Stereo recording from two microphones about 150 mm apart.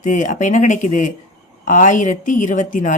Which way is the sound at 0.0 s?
55° left (ahead or behind).